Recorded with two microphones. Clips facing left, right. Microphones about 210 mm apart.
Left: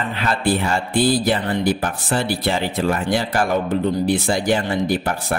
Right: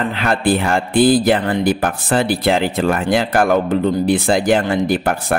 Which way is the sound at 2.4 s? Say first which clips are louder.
Right 5 dB; 90° right.